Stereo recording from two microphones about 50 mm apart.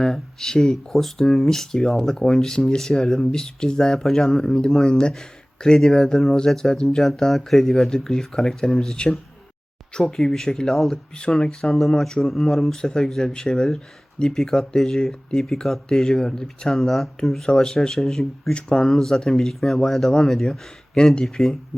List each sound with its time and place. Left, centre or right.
0.0 s speech: centre
10.9 s speech: centre